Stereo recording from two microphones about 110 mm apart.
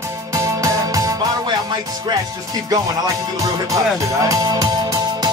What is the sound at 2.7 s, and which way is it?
Music, 30° right (ahead or behind).